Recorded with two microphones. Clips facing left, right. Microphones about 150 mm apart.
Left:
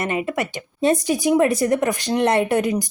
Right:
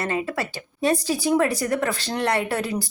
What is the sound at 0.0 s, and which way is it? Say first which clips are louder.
A woman's voice: left 3 dB; 20° left (ahead or behind).